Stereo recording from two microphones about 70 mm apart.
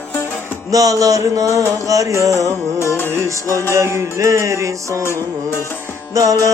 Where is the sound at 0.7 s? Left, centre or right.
Right.